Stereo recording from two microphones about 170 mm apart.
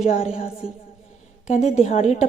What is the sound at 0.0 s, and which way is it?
A woman's voice, 40° left (ahead or behind).